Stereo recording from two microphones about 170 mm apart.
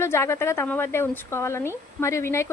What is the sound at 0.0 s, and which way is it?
A woman's voice, 15° left (ahead or behind).